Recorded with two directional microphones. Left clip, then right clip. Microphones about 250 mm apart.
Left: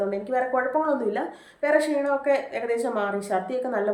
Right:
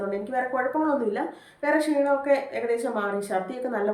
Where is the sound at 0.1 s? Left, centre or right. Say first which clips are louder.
Left 3 dB; centre.